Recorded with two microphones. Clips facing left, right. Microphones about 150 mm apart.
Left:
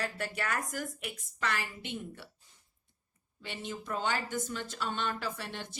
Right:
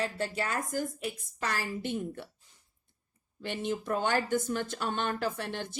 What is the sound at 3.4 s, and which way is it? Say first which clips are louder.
A woman's voice: right 7 dB; 50° right (ahead or behind).